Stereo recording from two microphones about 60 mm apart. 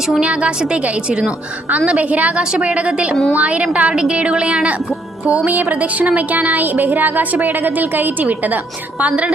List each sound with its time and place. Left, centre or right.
0.2 s a woman's voice: centre
2.4 s a woman's voice: centre
5.8 s a woman's voice: right